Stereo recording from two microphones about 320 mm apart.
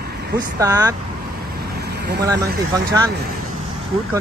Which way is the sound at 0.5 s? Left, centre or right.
Centre.